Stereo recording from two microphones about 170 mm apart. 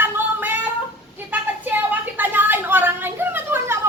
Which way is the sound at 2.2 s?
10° right (ahead or behind).